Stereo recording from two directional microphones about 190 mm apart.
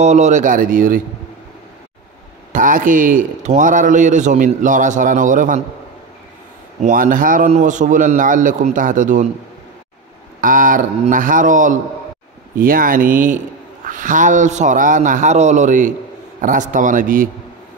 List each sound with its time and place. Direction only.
0.0 s speech: 35° right (ahead or behind)
2.5 s speech: 45° right (ahead or behind)
6.8 s speech: 45° right (ahead or behind)
10.4 s a man's voice: 45° right (ahead or behind)